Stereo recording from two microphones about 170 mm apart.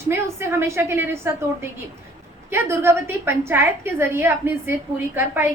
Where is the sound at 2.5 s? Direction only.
15° right (ahead or behind).